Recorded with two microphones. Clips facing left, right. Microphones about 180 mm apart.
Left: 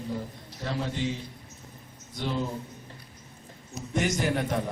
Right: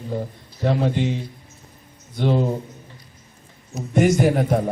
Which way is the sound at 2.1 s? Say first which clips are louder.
Right 10 dB; 60° right (ahead or behind).